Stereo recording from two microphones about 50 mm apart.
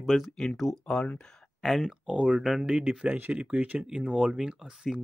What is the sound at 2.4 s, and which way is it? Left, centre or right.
Speech, centre.